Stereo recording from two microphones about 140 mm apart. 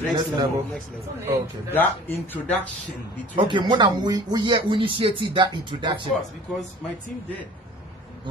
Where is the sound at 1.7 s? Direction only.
15° left (ahead or behind).